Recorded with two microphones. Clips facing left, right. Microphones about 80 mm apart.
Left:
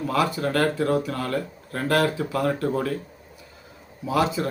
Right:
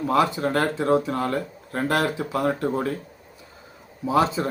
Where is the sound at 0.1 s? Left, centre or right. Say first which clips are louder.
Right 3 dB; right.